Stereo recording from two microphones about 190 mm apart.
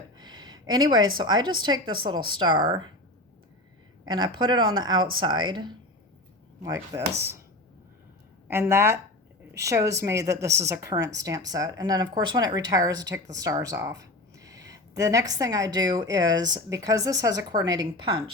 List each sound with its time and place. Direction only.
0.2 s a sound: 20° right (ahead or behind)
1.1 s a woman's voice: 20° right (ahead or behind)
4.1 s a woman's voice: 25° right (ahead or behind)
8.4 s a woman's voice: 10° right (ahead or behind)